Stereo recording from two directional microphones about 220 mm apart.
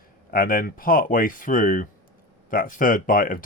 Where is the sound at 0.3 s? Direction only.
40° left (ahead or behind).